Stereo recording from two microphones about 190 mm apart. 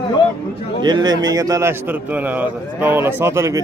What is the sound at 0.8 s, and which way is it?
A man's voice, 20° right (ahead or behind).